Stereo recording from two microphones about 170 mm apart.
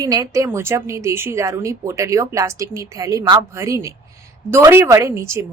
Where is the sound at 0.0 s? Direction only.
20° right (ahead or behind).